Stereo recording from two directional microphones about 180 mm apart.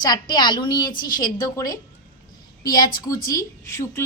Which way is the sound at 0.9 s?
50° left (ahead or behind).